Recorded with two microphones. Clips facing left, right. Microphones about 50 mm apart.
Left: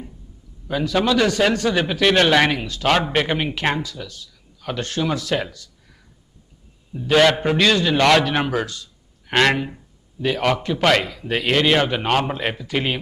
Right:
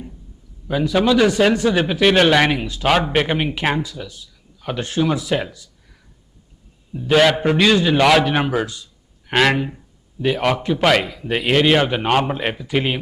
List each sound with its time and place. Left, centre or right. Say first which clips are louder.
0.9 s speech: right 3 dB; centre
1.8 s a man's voice: right 1 dB; centre
4.0 s a sound: right 1 dB; centre
4.6 s speech: right 3 dB; centre
5.3 s a man's voice: right 2 dB; centre
6.9 s a man's voice: right 1 dB; centre